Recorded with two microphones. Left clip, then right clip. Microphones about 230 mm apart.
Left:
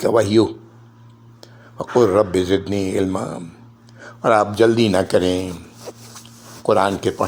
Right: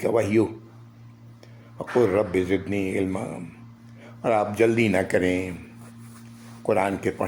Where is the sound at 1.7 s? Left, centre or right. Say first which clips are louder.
Left 6 dB; centre.